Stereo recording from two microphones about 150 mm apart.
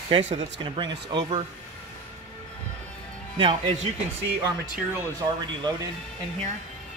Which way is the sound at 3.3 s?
35° right (ahead or behind).